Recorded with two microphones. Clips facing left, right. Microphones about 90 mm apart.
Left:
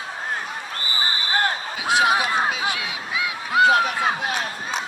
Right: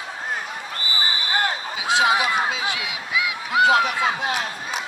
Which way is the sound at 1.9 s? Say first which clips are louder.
Even; 20° right (ahead or behind).